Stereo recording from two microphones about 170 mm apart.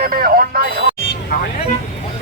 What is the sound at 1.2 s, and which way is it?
Vehicle, 65° left (ahead or behind).